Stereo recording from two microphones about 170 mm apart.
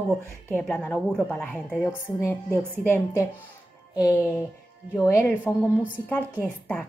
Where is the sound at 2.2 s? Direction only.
15° left (ahead or behind).